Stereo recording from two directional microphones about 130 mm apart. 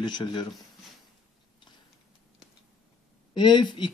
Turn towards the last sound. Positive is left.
turn(degrees=40)  # may be behind; listen again after turning